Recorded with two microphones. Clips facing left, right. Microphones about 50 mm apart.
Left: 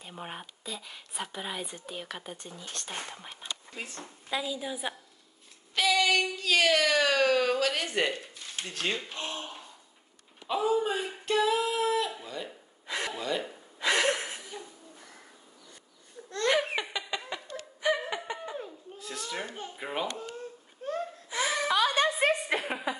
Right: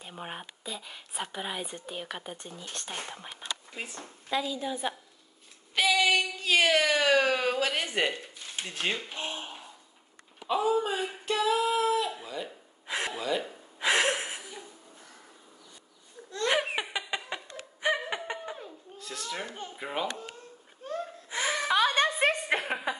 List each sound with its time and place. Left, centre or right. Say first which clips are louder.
0.0 s a woman's voice: right 1 dB; centre
3.7 s speech: right 1 dB; centre
4.0 s a woman's voice: right 3 dB; centre
5.8 s child singing: right 1 dB; centre
7.9 s a sound: even; centre
10.4 s singing: right 1 dB; centre
13.7 s chuckle: right 1 dB; centre
16.4 s laughter: left 1 dB; centre
18.6 s children playing: left 2 dB; centre
21.3 s a sound: even; right